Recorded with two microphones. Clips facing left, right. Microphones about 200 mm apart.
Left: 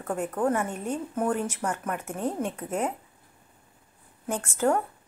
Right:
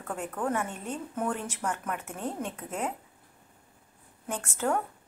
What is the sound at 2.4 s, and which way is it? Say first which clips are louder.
Speech: left 5 dB; 45° left (ahead or behind).